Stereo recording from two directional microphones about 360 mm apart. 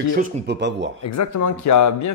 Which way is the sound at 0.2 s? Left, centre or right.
Right.